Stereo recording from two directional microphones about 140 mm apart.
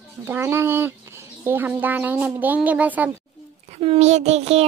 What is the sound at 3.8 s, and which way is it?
Child singing, 45° right (ahead or behind).